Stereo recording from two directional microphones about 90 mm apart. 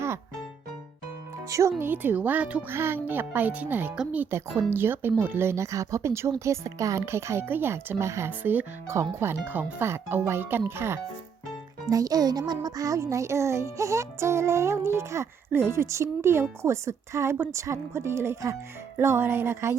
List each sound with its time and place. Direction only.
1.5 s music: 35° right (ahead or behind)
1.8 s speech: 25° right (ahead or behind)
2.7 s speech: 25° right (ahead or behind)
4.3 s speech: 30° right (ahead or behind)
8.3 s speech: 20° right (ahead or behind)
11.9 s music: 45° right (ahead or behind)
18.9 s speech: 25° right (ahead or behind)